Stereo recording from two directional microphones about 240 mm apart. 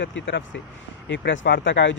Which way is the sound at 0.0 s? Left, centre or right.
Left.